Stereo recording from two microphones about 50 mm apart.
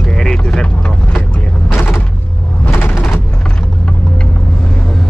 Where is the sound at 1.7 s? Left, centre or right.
Left.